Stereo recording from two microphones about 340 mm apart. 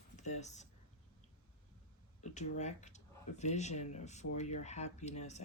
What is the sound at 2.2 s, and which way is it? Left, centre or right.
Speech, left.